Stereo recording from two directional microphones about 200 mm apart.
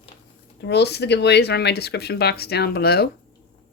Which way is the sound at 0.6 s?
55° left (ahead or behind).